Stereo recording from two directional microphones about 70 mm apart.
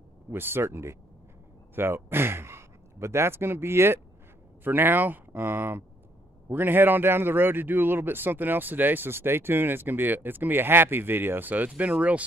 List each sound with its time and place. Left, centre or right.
0.3 s a man's voice: right